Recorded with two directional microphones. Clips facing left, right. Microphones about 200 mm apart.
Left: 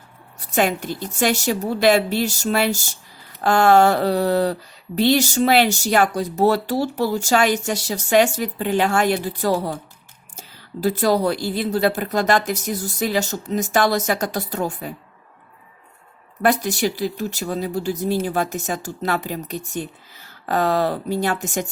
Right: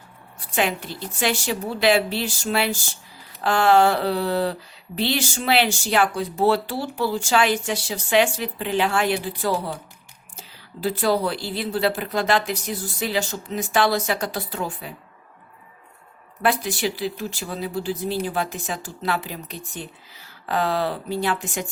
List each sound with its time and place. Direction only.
0.5 s a woman's voice: 45° left (ahead or behind)
16.4 s a woman's voice: 45° left (ahead or behind)